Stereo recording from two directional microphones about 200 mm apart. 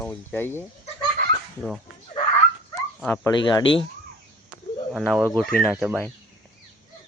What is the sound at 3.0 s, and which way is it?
Speech, 10° left (ahead or behind).